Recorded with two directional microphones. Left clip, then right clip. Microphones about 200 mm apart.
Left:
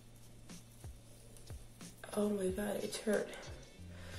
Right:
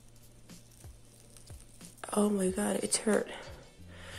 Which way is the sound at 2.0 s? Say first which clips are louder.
Right 6 dB; 35° right (ahead or behind).